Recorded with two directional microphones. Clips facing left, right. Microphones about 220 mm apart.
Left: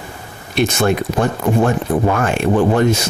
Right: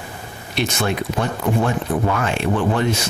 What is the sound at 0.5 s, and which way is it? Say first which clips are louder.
Speech: left 6 dB; 50° left (ahead or behind).